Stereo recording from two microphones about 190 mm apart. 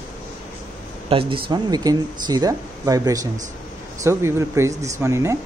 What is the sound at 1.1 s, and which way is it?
Speech, 30° right (ahead or behind).